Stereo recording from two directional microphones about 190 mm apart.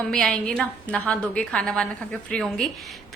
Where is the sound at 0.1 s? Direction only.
5° left (ahead or behind).